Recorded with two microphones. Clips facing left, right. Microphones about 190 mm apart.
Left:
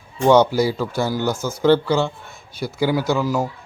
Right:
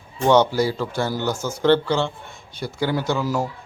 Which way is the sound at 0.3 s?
10° left (ahead or behind).